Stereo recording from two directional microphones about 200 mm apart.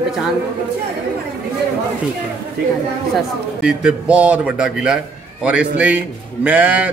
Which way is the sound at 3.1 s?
5° right (ahead or behind).